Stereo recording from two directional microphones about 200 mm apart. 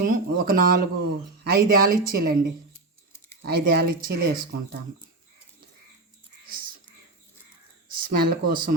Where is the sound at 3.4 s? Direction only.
50° right (ahead or behind).